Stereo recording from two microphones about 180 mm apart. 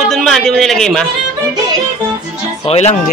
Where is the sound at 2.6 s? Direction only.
35° left (ahead or behind).